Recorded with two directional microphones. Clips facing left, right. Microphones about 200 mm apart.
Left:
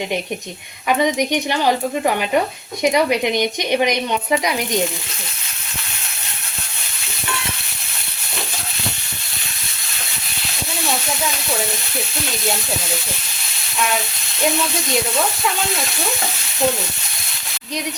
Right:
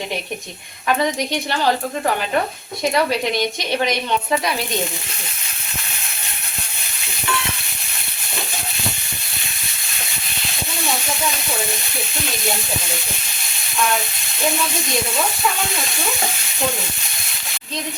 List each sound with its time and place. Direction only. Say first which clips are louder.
0.9 s a woman's voice: left 2 dB; 15° left (ahead or behind)